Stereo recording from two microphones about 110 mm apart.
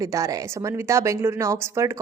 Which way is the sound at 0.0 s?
30° right (ahead or behind).